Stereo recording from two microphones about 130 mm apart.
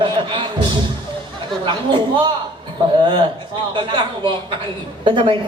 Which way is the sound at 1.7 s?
40° right (ahead or behind).